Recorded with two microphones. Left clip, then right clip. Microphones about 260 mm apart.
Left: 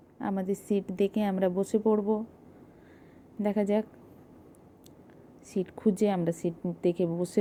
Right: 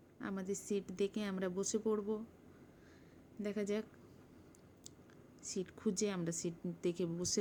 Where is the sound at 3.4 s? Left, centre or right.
Centre.